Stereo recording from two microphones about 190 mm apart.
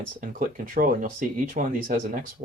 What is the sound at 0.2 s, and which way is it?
Speech, 45° right (ahead or behind).